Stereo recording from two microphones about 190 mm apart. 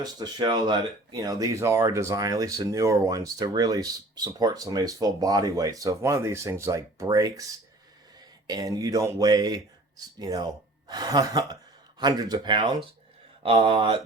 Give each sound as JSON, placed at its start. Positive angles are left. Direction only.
{"t": 0.0, "sound": "speech", "side_deg": -20}
{"t": 8.4, "sound": "speech", "side_deg": -20}